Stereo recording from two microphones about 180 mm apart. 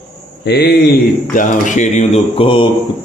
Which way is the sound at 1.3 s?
45° left (ahead or behind).